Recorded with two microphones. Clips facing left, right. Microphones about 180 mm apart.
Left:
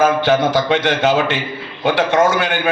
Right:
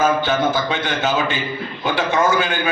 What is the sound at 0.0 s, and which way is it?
A man's voice, 70° left (ahead or behind).